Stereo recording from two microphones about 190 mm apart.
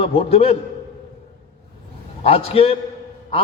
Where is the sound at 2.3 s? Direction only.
30° left (ahead or behind).